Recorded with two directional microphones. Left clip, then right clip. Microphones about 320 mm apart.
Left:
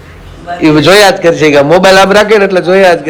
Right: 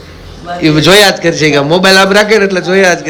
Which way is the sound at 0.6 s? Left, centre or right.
Centre.